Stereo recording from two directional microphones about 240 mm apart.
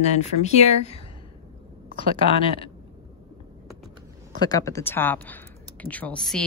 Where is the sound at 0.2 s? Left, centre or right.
Left.